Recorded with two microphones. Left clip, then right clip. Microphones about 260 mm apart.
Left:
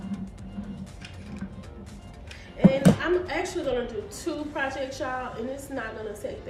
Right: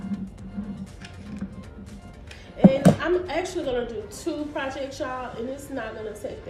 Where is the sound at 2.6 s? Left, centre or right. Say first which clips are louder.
Right 3 dB; centre.